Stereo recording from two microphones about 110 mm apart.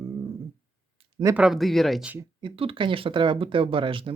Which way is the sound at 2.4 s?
55° right (ahead or behind).